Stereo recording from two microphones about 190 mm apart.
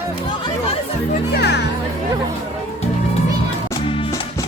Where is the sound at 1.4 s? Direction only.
60° left (ahead or behind).